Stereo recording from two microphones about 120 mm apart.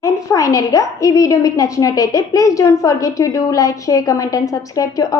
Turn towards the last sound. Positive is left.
turn(degrees=30)  # may be behind; listen again after turning